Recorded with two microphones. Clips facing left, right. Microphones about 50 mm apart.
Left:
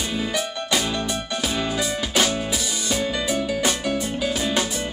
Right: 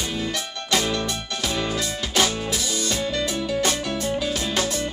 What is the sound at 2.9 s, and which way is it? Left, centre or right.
Music, centre.